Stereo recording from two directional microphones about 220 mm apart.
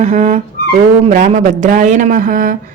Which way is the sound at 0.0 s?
30° right (ahead or behind).